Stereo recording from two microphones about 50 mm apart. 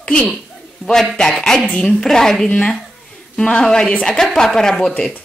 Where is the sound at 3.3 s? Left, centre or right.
Centre.